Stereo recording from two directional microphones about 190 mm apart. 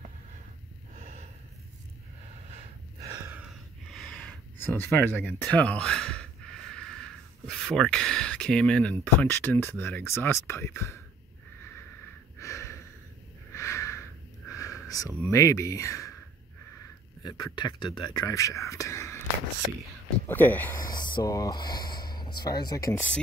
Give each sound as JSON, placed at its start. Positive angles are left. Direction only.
{"t": 0.9, "sound": "snort", "side_deg": -35}
{"t": 3.0, "sound": "gasp", "side_deg": -15}
{"t": 3.9, "sound": "a sound", "side_deg": 5}
{"t": 5.1, "sound": "speech", "side_deg": 5}
{"t": 7.4, "sound": "speech", "side_deg": 0}
{"t": 12.4, "sound": "snort", "side_deg": 15}
{"t": 13.5, "sound": "a sound", "side_deg": 15}
{"t": 14.5, "sound": "sniff", "side_deg": 15}
{"t": 14.9, "sound": "a sound", "side_deg": 20}
{"t": 15.3, "sound": "speech", "side_deg": 15}
{"t": 17.2, "sound": "speech", "side_deg": 20}
{"t": 20.2, "sound": "speech", "side_deg": 10}
{"t": 20.9, "sound": "a sound", "side_deg": 20}
{"t": 22.4, "sound": "speech", "side_deg": 20}